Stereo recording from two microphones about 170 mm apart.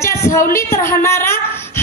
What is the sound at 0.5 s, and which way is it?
Speech, 15° left (ahead or behind).